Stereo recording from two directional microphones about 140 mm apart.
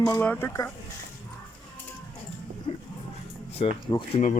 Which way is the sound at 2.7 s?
40° left (ahead or behind).